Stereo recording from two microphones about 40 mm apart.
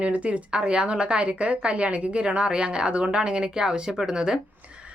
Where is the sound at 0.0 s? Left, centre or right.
Right.